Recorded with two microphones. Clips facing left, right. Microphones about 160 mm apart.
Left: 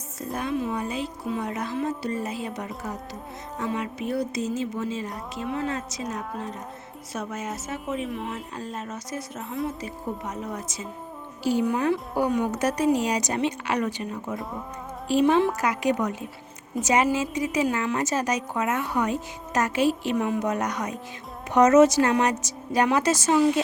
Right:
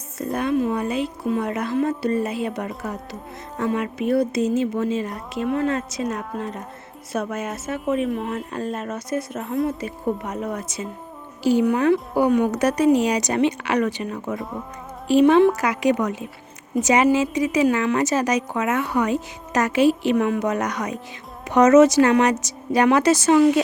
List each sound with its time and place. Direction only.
0.2 s a woman's voice: 60° right (ahead or behind)
11.4 s a woman's voice: 75° right (ahead or behind); by 16.1 s 90° right
16.8 s a woman's voice: 80° right
19.5 s a woman's voice: 80° right